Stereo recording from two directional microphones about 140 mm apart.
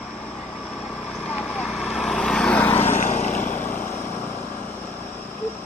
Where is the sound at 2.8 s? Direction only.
60° left (ahead or behind).